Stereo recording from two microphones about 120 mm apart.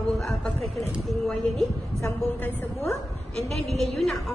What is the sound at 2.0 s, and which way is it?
Speech, 25° left (ahead or behind).